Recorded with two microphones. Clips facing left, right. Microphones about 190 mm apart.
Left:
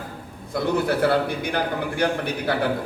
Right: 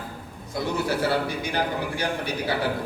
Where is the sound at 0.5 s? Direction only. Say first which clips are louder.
Left 4 dB; 55° left (ahead or behind).